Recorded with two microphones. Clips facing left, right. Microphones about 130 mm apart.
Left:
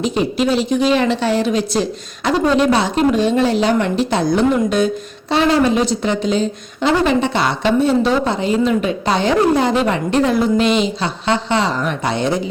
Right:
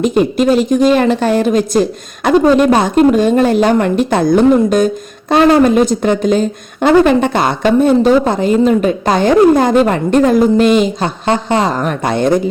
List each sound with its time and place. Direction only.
0.0 s a woman's voice: 50° right (ahead or behind)